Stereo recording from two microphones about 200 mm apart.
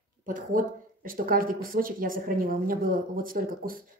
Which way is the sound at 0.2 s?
45° right (ahead or behind).